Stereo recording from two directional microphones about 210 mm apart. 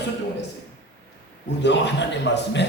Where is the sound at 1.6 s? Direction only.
55° left (ahead or behind).